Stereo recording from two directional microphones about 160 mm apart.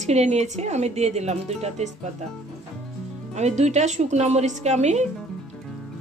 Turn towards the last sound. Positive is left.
turn(degrees=-45)  # may be behind; listen again after turning